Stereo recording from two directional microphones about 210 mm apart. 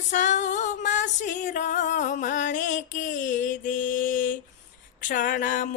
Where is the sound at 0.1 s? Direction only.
35° left (ahead or behind).